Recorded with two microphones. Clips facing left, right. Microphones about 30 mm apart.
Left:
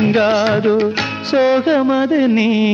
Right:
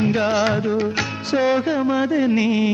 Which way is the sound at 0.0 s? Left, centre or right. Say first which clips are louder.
Left 5 dB; left.